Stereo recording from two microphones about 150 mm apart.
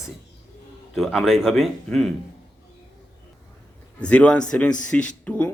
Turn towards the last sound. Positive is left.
turn(degrees=10)  # may be behind; listen again after turning